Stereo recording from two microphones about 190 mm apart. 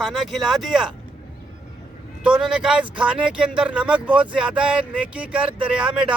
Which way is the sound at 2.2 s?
5° right (ahead or behind).